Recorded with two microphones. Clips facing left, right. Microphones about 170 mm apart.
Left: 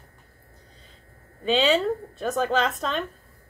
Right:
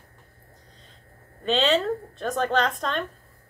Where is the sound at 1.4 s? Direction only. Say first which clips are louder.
Left 1 dB; 10° left (ahead or behind).